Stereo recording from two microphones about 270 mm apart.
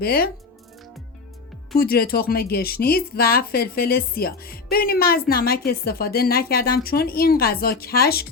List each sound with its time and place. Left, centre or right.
0.0 s speech: left
1.7 s speech: left